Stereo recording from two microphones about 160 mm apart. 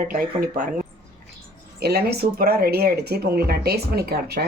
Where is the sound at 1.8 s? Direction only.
85° right.